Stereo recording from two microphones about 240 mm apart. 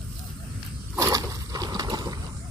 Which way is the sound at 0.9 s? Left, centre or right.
Centre.